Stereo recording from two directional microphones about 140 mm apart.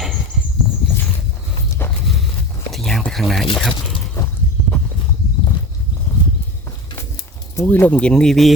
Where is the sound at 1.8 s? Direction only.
15° left (ahead or behind).